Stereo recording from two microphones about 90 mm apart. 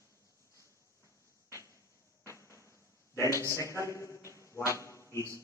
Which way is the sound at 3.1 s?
35° left (ahead or behind).